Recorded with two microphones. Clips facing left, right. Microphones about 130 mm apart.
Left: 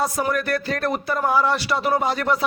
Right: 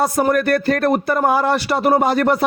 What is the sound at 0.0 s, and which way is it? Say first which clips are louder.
A man's voice: right 6 dB; 55° right (ahead or behind).